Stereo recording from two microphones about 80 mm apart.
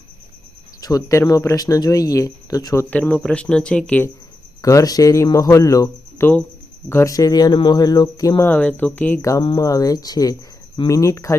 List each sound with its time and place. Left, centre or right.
0.8 s speech: left
2.9 s speech: centre
4.6 s speech: left
6.1 s speech: left
7.0 s speech: left
8.4 s speech: left
9.6 s speech: left